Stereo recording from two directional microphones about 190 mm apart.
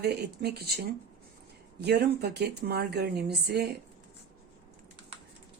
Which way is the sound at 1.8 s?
60° right (ahead or behind).